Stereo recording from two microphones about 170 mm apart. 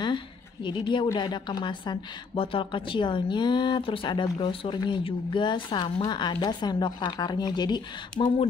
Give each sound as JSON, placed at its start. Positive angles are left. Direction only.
{"t": 0.7, "sound": "a woman's voice", "side_deg": 30}